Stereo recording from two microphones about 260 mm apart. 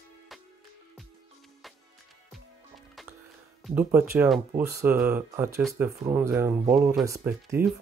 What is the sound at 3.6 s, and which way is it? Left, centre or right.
Speech, centre.